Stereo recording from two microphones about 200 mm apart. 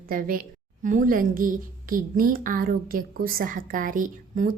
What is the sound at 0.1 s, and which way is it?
A woman's voice, 45° right (ahead or behind).